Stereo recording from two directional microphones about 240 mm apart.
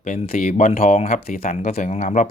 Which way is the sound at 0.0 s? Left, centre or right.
Left.